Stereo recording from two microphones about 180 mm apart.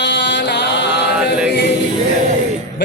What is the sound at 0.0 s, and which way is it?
Mantra, 70° left (ahead or behind).